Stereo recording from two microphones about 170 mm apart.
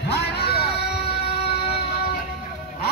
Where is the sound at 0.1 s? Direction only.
70° left (ahead or behind).